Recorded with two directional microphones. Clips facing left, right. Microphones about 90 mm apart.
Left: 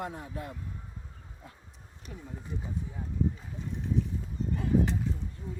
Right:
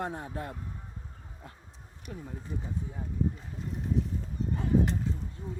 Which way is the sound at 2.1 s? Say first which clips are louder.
Right 4 dB; 45° right (ahead or behind).